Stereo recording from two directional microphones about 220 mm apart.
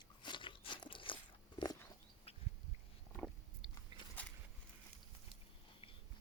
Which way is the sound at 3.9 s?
20° right (ahead or behind).